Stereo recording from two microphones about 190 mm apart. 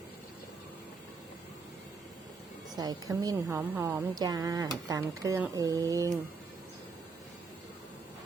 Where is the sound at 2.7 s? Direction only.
20° right (ahead or behind).